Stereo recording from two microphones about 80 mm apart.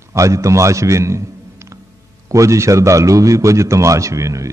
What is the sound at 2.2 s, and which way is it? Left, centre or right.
A man's voice, right.